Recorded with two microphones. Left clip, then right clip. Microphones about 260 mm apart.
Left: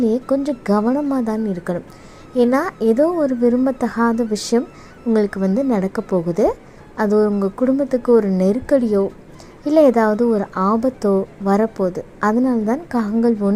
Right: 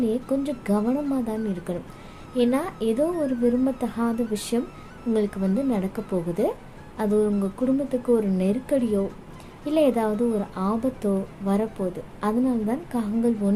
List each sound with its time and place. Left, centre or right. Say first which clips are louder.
0.0 s a woman's voice: left 7 dB; left
5.1 s a woman's voice: left 7 dB; left